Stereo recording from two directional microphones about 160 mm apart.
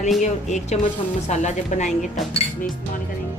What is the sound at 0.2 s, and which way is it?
Speech, 45° left (ahead or behind).